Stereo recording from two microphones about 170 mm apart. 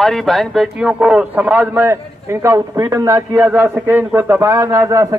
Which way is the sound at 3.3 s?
10° right (ahead or behind).